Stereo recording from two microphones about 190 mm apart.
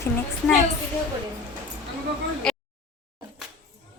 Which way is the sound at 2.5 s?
5° left (ahead or behind).